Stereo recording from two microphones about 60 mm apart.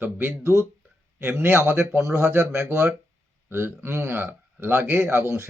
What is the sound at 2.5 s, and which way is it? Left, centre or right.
Speech, right.